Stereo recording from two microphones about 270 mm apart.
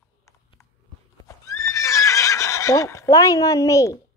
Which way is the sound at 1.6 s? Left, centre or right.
Centre.